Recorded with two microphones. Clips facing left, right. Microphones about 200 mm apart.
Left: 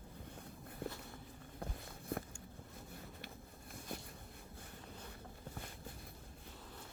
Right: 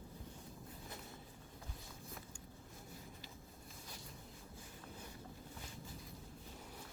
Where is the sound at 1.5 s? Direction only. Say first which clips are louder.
Left 8 dB; 60° left (ahead or behind).